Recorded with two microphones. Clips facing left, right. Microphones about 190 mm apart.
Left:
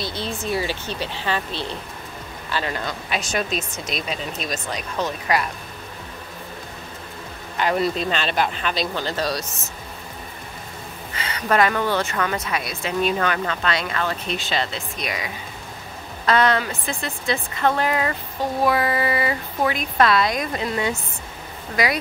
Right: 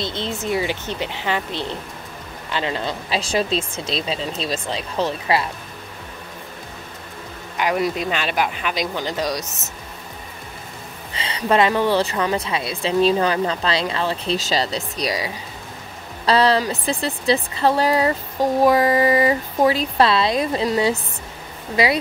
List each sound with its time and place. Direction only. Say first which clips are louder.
0.0 s speech: right 2 dB; 20° right (ahead or behind)
7.5 s speech: even; 10° right (ahead or behind)
11.4 s speech: right 3 dB; 25° right (ahead or behind)